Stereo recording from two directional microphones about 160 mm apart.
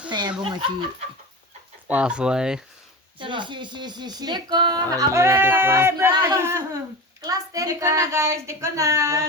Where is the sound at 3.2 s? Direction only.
30° right (ahead or behind).